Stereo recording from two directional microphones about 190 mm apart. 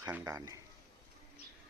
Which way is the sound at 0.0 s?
15° right (ahead or behind).